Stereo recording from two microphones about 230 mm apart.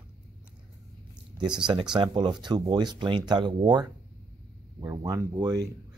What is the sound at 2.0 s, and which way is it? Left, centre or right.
Speech, centre.